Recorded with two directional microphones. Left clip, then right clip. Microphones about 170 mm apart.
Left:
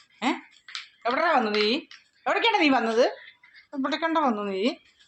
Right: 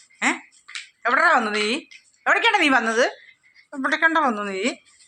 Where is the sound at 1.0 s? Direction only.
5° right (ahead or behind).